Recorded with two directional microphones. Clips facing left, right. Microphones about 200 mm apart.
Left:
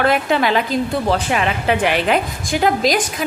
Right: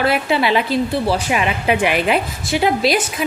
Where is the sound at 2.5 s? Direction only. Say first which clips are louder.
Even; 40° left (ahead or behind).